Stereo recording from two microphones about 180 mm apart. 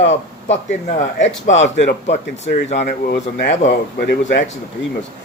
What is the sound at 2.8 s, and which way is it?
Speech, 70° left (ahead or behind).